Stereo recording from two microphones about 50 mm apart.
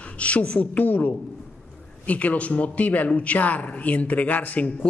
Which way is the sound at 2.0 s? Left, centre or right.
Left.